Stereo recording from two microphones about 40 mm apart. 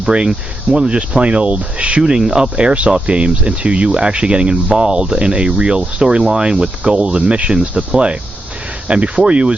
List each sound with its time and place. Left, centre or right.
0.0 s speech: right
2.0 s speech: centre